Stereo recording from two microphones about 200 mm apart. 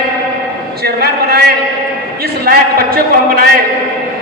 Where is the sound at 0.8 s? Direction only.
50° right (ahead or behind).